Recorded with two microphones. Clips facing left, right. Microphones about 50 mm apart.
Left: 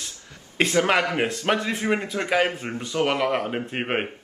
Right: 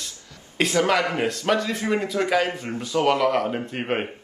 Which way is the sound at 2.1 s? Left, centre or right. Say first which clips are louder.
Right 1 dB; centre.